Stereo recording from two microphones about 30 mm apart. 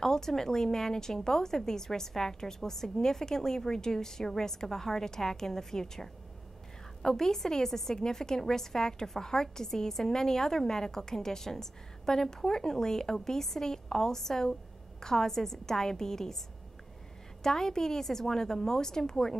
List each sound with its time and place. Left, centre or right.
0.0 s a woman's voice: centre
17.4 s a woman's voice: centre